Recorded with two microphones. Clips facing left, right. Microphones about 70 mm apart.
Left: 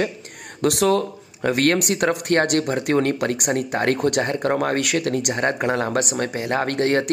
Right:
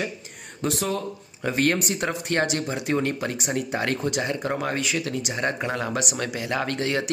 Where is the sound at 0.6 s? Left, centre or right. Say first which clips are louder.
Left 8 dB; left.